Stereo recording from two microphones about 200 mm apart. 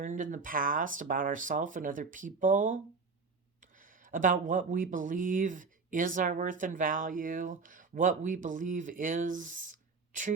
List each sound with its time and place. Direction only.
0.0 s speech: 40° right (ahead or behind)
4.0 s speech: 40° right (ahead or behind)